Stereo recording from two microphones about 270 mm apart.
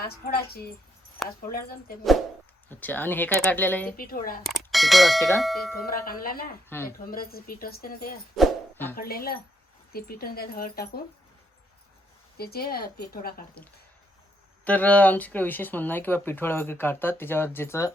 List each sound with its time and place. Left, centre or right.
0.0 s speech: left
2.6 s speech: centre
3.9 s speech: left
4.4 s speech: centre
5.8 s speech: left
6.7 s speech: centre
7.0 s speech: left
8.4 s a sound: centre
9.0 s speech: left
12.4 s speech: left
14.6 s speech: centre